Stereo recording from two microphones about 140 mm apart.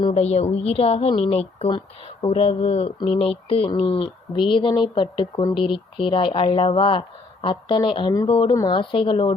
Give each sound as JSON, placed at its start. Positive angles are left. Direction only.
{"t": 0.1, "sound": "a woman's voice", "side_deg": 50}